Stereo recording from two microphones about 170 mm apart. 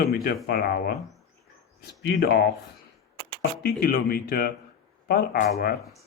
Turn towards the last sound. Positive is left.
turn(degrees=60)  # may be behind; listen again after turning